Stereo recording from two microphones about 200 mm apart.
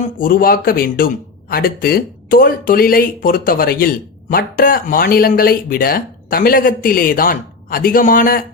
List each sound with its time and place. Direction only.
0.2 s speech: 45° left (ahead or behind)